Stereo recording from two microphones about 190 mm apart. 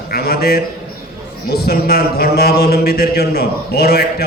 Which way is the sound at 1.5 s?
55° left (ahead or behind).